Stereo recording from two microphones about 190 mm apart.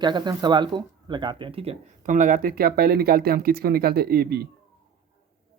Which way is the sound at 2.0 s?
45° right (ahead or behind).